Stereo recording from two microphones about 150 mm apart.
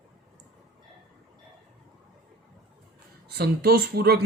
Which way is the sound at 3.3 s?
90° right.